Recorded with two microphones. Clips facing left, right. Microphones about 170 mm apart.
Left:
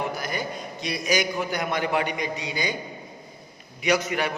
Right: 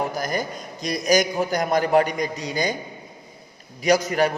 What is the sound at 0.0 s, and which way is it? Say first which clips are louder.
A man's voice: right 4 dB; 40° right (ahead or behind).